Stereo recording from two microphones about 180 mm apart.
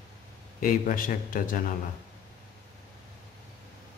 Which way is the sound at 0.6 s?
50° left (ahead or behind).